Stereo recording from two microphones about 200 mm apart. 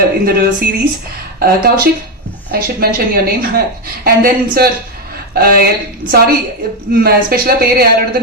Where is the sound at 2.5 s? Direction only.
50° right (ahead or behind).